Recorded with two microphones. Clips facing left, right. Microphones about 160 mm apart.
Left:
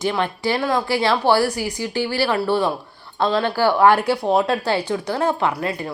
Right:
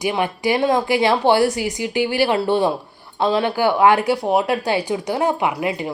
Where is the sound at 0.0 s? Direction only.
15° right (ahead or behind).